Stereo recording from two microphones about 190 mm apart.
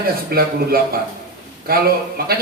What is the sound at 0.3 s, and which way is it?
A man's voice, 50° right (ahead or behind).